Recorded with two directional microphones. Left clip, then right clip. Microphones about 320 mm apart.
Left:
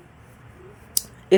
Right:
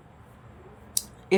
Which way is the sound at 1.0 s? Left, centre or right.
Centre.